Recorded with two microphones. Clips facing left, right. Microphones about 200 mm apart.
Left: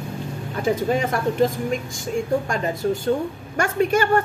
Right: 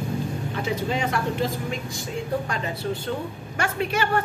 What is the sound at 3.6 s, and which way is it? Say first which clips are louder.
Speech: left 6 dB; 45° left (ahead or behind).